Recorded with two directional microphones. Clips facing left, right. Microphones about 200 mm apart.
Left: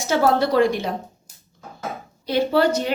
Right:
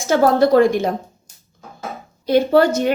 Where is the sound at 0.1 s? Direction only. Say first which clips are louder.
Right 5 dB; 50° right (ahead or behind).